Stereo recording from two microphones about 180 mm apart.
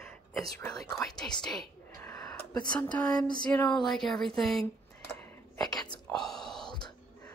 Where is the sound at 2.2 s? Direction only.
5° left (ahead or behind).